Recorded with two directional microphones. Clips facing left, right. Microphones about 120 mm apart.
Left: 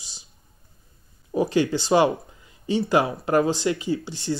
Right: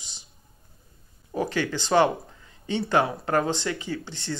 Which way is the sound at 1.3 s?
15° left (ahead or behind).